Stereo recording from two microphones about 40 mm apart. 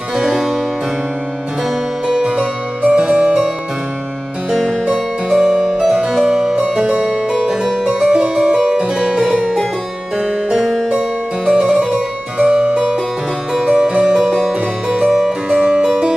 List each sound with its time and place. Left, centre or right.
0.3 s harpsichord: centre
2.2 s harpsichord: right
4.8 s music: centre
6.2 s harpsichord: centre
10.1 s music: centre
11.5 s harpsichord: centre
14.2 s music: centre
14.5 s music: right
15.1 s harpsichord: centre
15.6 s harpsichord: centre
15.9 s music: centre